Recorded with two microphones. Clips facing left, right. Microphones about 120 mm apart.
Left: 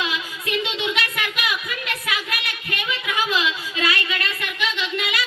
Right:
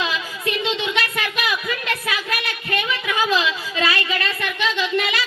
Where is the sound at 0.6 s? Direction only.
30° right (ahead or behind).